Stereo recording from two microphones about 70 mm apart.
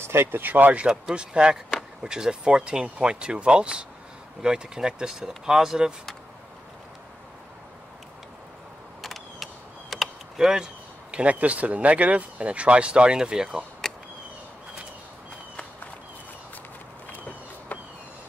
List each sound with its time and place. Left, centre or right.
0.0 s speech: right
0.8 s speech: centre
9.0 s mechanisms: centre
17.7 s vehicle: left